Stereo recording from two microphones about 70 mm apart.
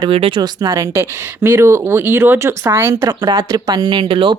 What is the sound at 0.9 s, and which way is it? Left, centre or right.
Speech, right.